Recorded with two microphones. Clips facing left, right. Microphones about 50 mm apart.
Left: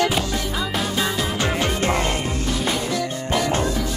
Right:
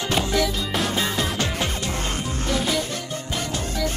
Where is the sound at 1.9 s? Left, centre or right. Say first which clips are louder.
Left 7 dB; left.